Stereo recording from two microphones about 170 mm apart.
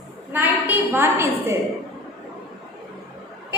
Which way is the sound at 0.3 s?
15° right (ahead or behind).